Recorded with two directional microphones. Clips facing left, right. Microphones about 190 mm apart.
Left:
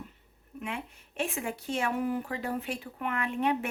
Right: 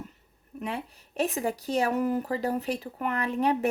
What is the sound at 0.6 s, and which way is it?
Speech, 35° right (ahead or behind).